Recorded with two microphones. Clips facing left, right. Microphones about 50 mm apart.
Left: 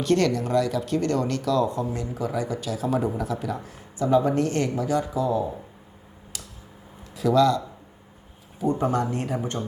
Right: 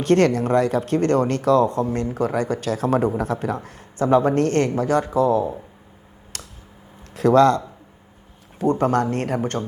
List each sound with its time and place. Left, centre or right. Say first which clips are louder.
0.0 s speech: right 5 dB; right
6.3 s a sound: right 4 dB; right
7.1 s speech: right 5 dB; right